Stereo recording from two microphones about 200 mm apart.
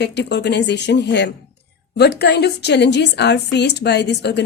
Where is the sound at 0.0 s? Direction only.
55° left (ahead or behind).